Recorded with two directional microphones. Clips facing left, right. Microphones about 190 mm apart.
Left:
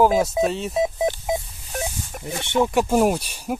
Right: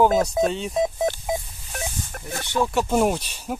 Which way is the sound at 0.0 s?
5° left (ahead or behind).